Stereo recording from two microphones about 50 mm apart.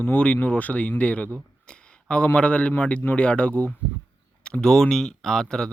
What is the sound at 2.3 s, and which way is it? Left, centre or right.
Speech, left.